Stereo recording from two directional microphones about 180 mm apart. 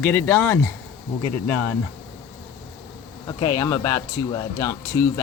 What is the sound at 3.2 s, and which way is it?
Speech, 20° left (ahead or behind).